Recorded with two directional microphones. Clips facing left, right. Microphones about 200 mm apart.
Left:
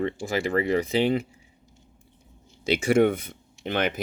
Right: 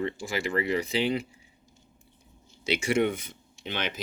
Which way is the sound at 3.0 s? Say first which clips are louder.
Left 6 dB; 55° left (ahead or behind).